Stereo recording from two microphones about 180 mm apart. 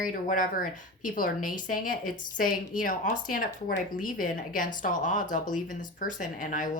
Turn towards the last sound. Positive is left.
turn(degrees=45)  # may be behind; listen again after turning